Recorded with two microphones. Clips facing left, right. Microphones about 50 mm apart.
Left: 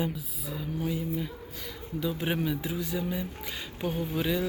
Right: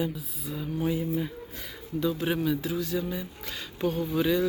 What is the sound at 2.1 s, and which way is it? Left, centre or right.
Speech, centre.